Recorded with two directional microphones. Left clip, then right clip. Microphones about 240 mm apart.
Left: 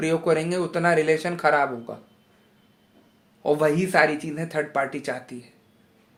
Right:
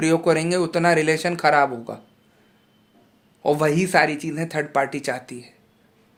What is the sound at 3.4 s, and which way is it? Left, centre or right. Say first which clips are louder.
Speech: right 1 dB; right.